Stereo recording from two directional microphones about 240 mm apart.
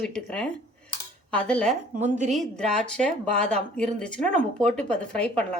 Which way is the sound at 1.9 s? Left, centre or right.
Right.